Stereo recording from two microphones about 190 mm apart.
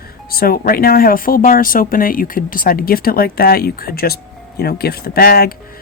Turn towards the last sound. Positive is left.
turn(degrees=50)  # may be behind; listen again after turning